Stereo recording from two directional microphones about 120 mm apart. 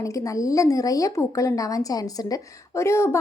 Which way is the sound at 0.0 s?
25° left (ahead or behind).